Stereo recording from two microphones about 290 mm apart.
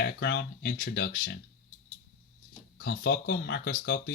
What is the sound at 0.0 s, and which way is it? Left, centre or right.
Speech, left.